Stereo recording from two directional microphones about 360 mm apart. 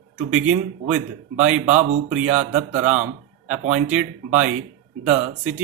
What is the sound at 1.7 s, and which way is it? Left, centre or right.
Speech, centre.